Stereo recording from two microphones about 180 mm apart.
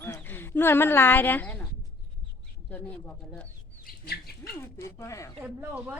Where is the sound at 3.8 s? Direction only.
60° left (ahead or behind).